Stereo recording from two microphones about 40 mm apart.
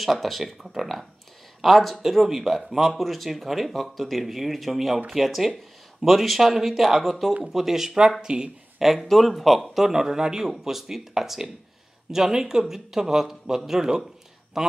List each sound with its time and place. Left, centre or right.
0.0 s speech: centre; by 8.5 s right
8.7 s speech: centre